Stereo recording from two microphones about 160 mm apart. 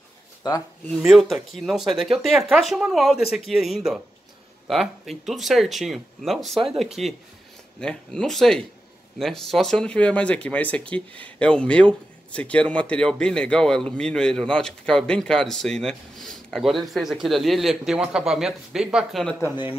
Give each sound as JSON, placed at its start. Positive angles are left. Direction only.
{"t": 0.4, "sound": "speech", "side_deg": 25}
{"t": 0.8, "sound": "speech", "side_deg": 0}